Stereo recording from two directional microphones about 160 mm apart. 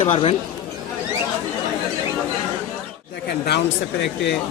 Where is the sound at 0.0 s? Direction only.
35° left (ahead or behind).